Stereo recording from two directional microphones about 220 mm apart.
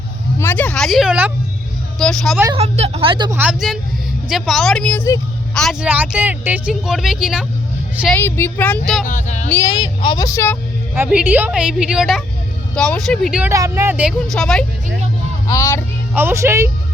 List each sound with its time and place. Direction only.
0.3 s speech: 10° left (ahead or behind)
2.6 s speech: 30° right (ahead or behind)
3.3 s speech: 5° right (ahead or behind); by 5.2 s 10° left (ahead or behind)
5.5 s speech: centre (ahead or behind)
8.1 s speech: 10° left (ahead or behind)
9.0 s speech: 35° left (ahead or behind)
9.5 s speech: 15° left (ahead or behind)
10.9 s speech: 10° right (ahead or behind)
15.4 s speech: 15° left (ahead or behind)
16.1 s a woman's voice: 10° right (ahead or behind)